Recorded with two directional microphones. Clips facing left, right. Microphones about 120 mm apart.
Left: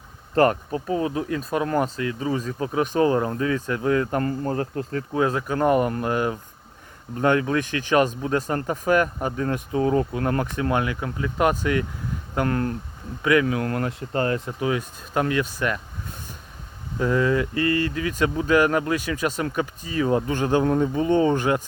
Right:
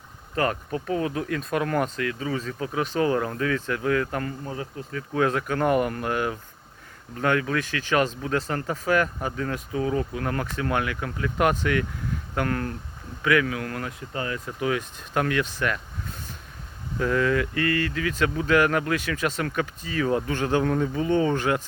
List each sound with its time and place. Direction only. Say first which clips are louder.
0.3 s speech: left 6 dB; 35° left (ahead or behind)
0.9 s speech: left 2 dB; 25° left (ahead or behind)
4.4 s bee: left 8 dB; 55° left (ahead or behind)
5.1 s speech: left 1 dB; 20° left (ahead or behind)
9.2 s speech: left 4 dB; 30° left (ahead or behind)
10.4 s speech: left 3 dB; 20° left (ahead or behind); by 14.3 s 45° left (ahead or behind)
14.3 s speech: left 2 dB; 25° left (ahead or behind)
17.0 s speech: left 2 dB; 20° left (ahead or behind)